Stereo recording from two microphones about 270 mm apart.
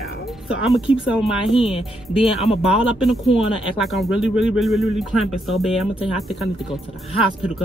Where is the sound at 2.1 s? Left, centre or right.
Centre.